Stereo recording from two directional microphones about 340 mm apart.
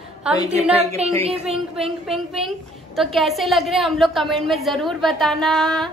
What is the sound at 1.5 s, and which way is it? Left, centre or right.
A woman's voice, centre.